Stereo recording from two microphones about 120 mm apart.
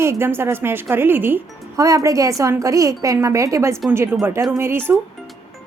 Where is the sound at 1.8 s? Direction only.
30° right (ahead or behind).